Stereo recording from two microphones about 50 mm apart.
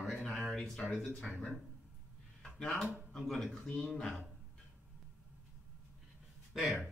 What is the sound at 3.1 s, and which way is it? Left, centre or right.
Speech, centre.